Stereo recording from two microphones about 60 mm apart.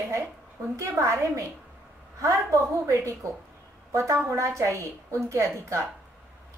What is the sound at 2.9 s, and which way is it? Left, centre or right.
A woman's voice, right.